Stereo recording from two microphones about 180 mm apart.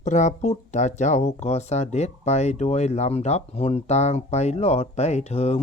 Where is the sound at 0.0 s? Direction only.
40° left (ahead or behind).